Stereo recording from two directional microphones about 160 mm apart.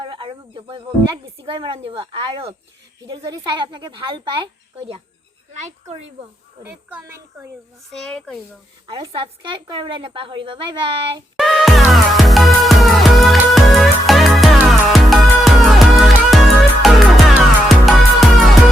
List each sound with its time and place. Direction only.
0.0 s speech: 30° right (ahead or behind)
6.6 s speech: 10° right (ahead or behind)
7.9 s a child's voice: 5° left (ahead or behind)
8.9 s a woman's voice: 30° right (ahead or behind)
11.3 s music: centre (ahead or behind)